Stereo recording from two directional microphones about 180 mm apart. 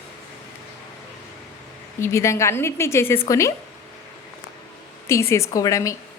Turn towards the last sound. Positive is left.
turn(degrees=15)  # may be behind; listen again after turning